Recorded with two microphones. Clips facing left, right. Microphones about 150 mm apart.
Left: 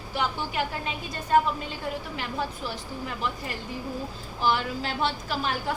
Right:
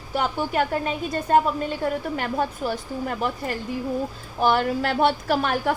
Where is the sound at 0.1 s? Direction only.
50° right (ahead or behind).